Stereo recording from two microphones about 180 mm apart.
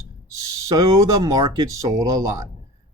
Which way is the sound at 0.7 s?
20° right (ahead or behind).